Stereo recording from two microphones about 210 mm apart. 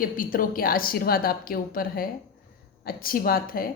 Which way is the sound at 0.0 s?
40° left (ahead or behind).